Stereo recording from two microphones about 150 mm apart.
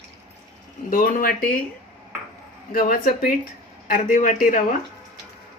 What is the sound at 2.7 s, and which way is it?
Speech, 70° left (ahead or behind).